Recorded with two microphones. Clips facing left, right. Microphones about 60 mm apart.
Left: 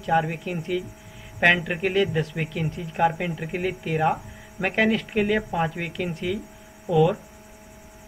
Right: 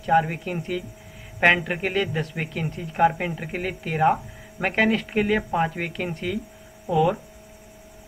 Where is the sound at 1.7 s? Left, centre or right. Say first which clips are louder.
Left 2 dB; centre.